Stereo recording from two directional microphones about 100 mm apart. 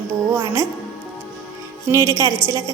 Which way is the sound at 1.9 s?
30° right (ahead or behind).